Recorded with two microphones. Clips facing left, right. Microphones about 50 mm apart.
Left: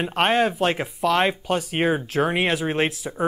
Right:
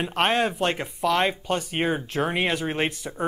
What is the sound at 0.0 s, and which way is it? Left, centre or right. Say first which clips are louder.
Speech: left 3 dB; centre.